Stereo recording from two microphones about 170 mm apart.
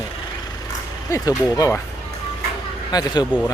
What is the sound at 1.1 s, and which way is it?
Speech, 20° left (ahead or behind).